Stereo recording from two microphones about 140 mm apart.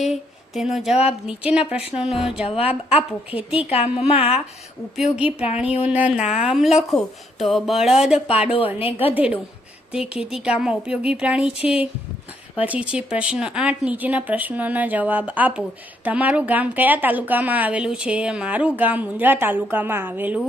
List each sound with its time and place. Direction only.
0.0 s a woman's voice: centre (ahead or behind)
2.5 s a woman's voice: 45° left (ahead or behind)
3.2 s a woman's voice: 10° right (ahead or behind)
3.6 s a woman's voice: 45° left (ahead or behind)
5.8 s a woman's voice: 10° right (ahead or behind)
8.4 s a woman's voice: 40° left (ahead or behind)
9.1 s a woman's voice: 10° right (ahead or behind)